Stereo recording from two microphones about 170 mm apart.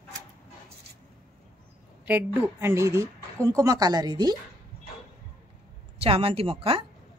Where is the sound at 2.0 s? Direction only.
10° right (ahead or behind).